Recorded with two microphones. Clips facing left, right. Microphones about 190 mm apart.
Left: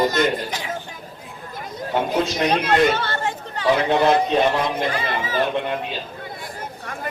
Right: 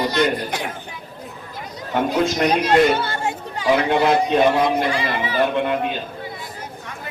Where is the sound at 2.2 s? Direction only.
55° right (ahead or behind).